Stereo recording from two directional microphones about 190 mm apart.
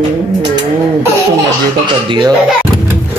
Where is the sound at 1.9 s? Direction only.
25° right (ahead or behind).